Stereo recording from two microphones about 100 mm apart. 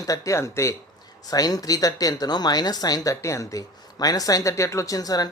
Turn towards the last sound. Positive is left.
turn(degrees=40)  # may be behind; listen again after turning